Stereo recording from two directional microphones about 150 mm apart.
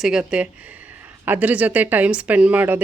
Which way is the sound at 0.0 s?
5° right (ahead or behind).